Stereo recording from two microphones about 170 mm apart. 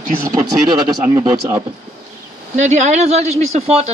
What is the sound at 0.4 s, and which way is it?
Speech, 20° right (ahead or behind).